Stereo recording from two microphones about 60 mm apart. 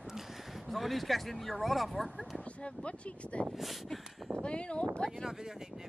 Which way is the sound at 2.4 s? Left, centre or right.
Centre.